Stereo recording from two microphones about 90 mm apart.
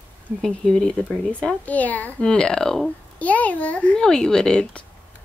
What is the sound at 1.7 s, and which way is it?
A child's voice, 15° left (ahead or behind).